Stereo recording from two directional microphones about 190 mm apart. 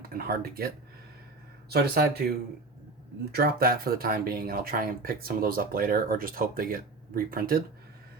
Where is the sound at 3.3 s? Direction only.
50° right (ahead or behind).